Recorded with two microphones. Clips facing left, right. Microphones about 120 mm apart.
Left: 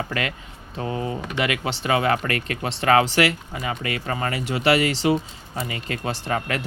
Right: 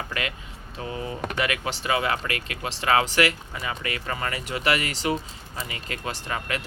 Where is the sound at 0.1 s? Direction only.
35° left (ahead or behind).